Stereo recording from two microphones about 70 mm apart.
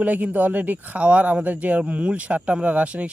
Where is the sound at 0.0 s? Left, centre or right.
Right.